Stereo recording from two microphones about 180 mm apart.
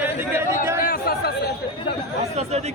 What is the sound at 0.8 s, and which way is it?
Speech, 55° left (ahead or behind).